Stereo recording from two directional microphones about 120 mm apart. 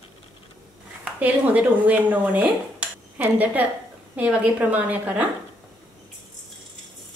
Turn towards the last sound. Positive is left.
turn(degrees=-15)  # may be behind; listen again after turning